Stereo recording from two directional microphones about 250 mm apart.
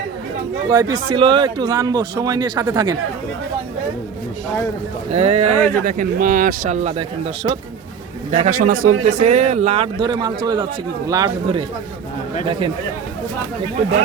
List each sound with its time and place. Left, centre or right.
0.7 s speech: centre
5.1 s speech: right
8.3 s a man's voice: right